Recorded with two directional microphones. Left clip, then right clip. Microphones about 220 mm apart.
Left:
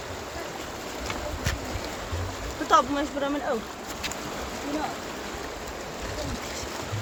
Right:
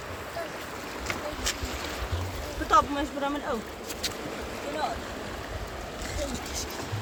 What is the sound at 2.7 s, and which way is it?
Speech, 20° left (ahead or behind).